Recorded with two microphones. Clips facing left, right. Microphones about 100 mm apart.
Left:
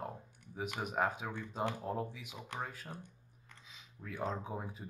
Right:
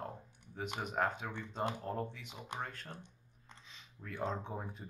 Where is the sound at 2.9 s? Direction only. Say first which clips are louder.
Left 3 dB; 20° right (ahead or behind).